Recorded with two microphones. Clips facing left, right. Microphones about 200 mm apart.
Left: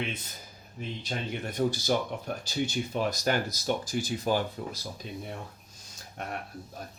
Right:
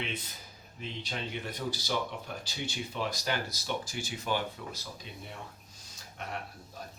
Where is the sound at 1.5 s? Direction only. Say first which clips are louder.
Left 11 dB; 50° left (ahead or behind).